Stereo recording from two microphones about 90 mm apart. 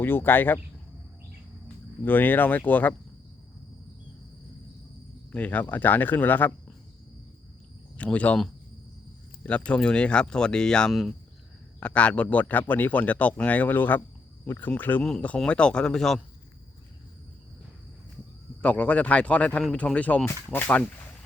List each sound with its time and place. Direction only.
0.0 s speech: 25° left (ahead or behind)
1.6 s speech: 20° left (ahead or behind)
5.3 s a man's voice: 15° left (ahead or behind)
7.9 s a man's voice: 15° left (ahead or behind)
9.4 s a man's voice: 15° left (ahead or behind)
18.6 s a man's voice: 15° left (ahead or behind)